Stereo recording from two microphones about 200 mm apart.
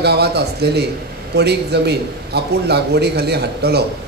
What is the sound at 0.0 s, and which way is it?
Speech, 55° right (ahead or behind).